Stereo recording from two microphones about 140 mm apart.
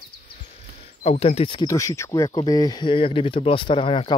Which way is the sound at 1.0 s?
50° left (ahead or behind).